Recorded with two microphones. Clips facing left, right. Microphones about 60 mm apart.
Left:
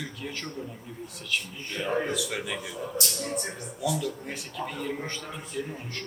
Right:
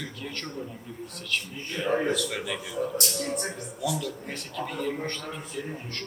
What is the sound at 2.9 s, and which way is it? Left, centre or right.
Speech, right.